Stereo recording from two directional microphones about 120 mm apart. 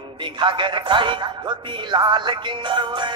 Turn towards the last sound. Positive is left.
turn(degrees=-40)  # may be behind; listen again after turning